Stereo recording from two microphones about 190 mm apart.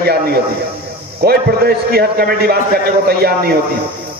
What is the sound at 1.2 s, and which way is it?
A man's voice, 55° right (ahead or behind).